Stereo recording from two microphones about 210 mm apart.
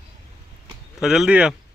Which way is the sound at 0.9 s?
5° right (ahead or behind).